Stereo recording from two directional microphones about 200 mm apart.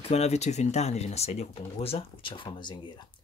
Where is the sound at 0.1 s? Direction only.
35° left (ahead or behind).